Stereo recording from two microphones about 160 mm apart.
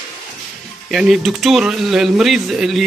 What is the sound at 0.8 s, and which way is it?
Speech, centre (ahead or behind).